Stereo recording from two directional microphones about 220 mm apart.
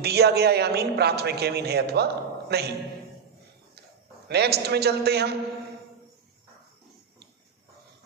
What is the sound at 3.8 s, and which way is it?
A man's voice, 50° right (ahead or behind).